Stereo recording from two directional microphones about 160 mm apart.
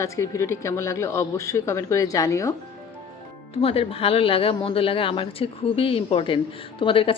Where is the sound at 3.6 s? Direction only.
40° left (ahead or behind).